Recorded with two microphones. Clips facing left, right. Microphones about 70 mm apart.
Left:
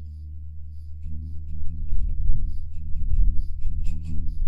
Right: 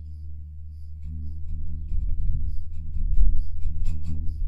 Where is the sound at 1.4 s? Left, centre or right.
Right.